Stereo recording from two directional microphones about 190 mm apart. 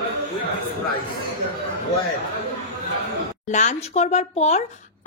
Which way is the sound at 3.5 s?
40° left (ahead or behind).